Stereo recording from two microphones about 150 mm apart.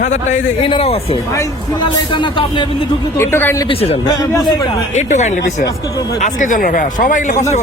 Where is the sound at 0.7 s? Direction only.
40° left (ahead or behind).